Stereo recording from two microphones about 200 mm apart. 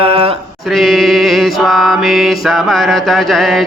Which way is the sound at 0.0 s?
30° right (ahead or behind).